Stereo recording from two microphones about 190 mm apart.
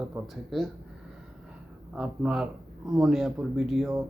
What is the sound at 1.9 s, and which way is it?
Speech, 5° right (ahead or behind).